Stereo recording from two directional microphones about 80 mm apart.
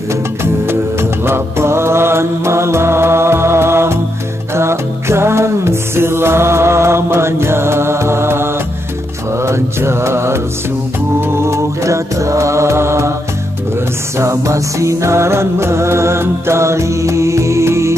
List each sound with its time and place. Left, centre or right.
0.1 s music: right
9.4 s mantra: right
11.1 s music: right
14.1 s music: right